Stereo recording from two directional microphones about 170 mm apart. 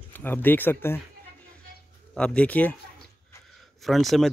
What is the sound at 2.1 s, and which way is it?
Speech, 5° left (ahead or behind).